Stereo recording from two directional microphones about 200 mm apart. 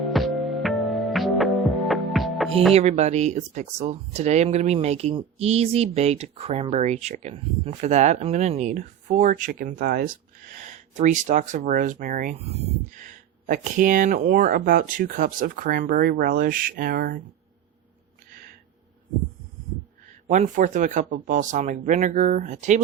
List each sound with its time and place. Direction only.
0.0 s music: centre (ahead or behind)
2.7 s speech: 35° right (ahead or behind)
20.2 s speech: 45° right (ahead or behind)